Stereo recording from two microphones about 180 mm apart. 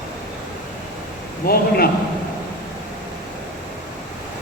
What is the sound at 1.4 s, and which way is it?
Speech, 55° left (ahead or behind).